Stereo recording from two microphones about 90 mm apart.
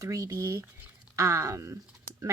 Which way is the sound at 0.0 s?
40° right (ahead or behind).